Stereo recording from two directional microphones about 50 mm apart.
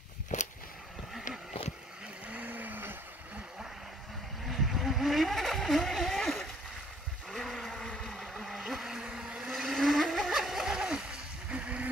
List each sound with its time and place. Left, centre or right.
2.2 s vehicle: right
4.5 s vehicle: centre
7.2 s a sound: centre
7.7 s boat: centre
9.5 s vehicle: centre
11.5 s music: right